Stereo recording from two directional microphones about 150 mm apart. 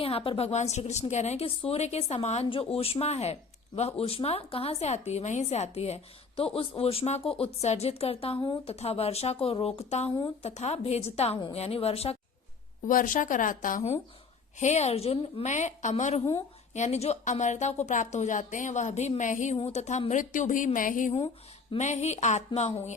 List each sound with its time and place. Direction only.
0.0 s a woman's voice: 40° left (ahead or behind)
12.9 s a woman's voice: 60° left (ahead or behind)
14.6 s a woman's voice: 50° left (ahead or behind)
19.5 s a woman's voice: 45° left (ahead or behind); by 21.1 s 60° left (ahead or behind)
21.8 s a woman's voice: 50° left (ahead or behind)